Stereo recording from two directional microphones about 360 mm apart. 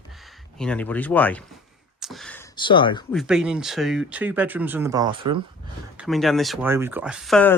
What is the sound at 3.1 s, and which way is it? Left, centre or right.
Speech, centre.